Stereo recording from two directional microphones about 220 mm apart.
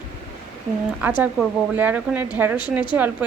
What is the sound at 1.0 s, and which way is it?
Speech, 5° right (ahead or behind).